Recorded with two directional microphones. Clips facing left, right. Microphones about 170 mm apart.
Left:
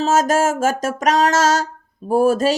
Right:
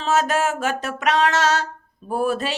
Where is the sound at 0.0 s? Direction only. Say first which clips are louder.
Left 4 dB; 40° left (ahead or behind).